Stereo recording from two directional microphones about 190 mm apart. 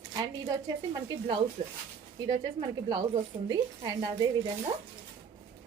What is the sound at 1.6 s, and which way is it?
Speech, 35° right (ahead or behind).